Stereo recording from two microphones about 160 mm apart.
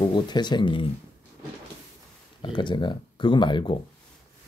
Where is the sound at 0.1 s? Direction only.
25° left (ahead or behind).